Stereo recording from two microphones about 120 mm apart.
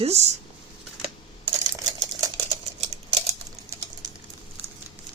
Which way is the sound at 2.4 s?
60° right (ahead or behind).